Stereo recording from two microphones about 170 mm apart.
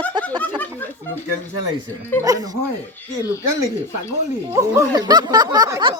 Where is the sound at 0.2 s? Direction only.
10° left (ahead or behind).